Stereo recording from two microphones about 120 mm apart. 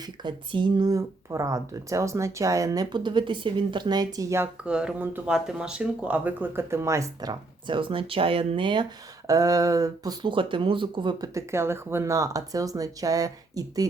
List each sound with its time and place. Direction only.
0.0 s speech: 40° right (ahead or behind)
4.6 s speech: 10° right (ahead or behind); by 11.3 s 40° right (ahead or behind)
11.3 s speech: 20° right (ahead or behind)